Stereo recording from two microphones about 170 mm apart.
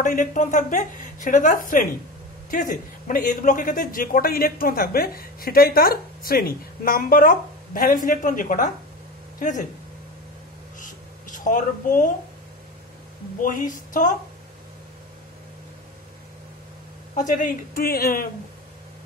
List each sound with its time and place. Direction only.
0.0 s a man's voice: 50° left (ahead or behind)
10.8 s a sound: 50° left (ahead or behind)
13.4 s speech: 50° left (ahead or behind)
17.1 s a man's voice: 50° left (ahead or behind)